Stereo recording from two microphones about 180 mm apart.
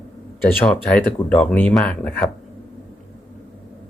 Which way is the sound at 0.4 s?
5° left (ahead or behind).